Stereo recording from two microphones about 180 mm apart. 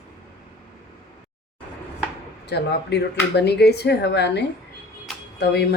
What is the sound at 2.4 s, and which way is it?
Speech, 70° left (ahead or behind).